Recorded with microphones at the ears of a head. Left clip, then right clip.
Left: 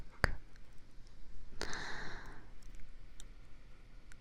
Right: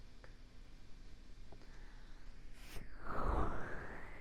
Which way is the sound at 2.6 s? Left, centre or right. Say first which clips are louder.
Right 15 dB; right.